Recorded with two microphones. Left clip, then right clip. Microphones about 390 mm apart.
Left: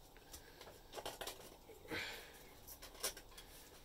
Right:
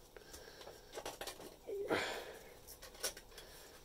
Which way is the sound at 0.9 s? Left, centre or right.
Centre.